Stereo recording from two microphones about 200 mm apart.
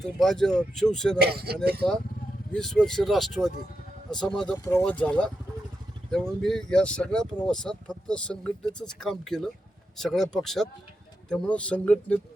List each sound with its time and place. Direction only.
0.0 s speech: centre (ahead or behind)
1.2 s speech: 50° right (ahead or behind)
2.5 s speech: 5° left (ahead or behind)